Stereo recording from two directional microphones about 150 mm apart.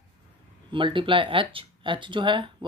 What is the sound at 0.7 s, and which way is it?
Speech, 35° right (ahead or behind).